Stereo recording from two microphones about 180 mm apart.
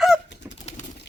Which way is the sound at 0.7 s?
35° left (ahead or behind).